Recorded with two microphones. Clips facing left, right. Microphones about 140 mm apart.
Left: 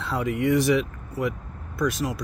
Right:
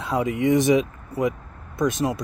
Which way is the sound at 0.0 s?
20° right (ahead or behind).